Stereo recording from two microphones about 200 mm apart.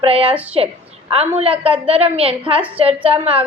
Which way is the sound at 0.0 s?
30° right (ahead or behind).